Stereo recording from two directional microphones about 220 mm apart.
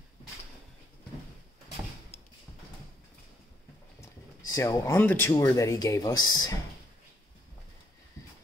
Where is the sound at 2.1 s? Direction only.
45° right (ahead or behind).